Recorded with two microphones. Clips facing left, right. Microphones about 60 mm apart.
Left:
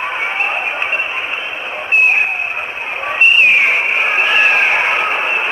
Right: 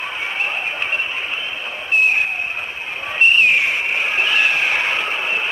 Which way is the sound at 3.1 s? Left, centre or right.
Left.